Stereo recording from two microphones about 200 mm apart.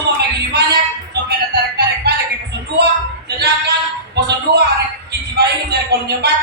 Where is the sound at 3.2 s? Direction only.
55° right (ahead or behind).